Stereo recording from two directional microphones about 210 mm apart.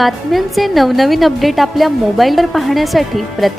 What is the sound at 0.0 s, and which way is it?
A woman's voice, centre (ahead or behind).